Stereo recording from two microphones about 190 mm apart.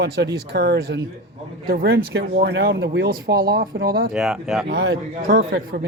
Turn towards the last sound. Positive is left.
turn(degrees=-60)  # may be behind; listen again after turning